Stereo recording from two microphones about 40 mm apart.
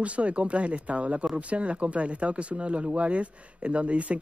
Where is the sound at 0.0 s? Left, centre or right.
Right.